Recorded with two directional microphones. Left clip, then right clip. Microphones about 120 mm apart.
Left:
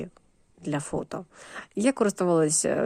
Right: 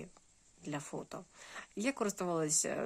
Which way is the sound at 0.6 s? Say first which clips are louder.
Left 12 dB; 50° left (ahead or behind).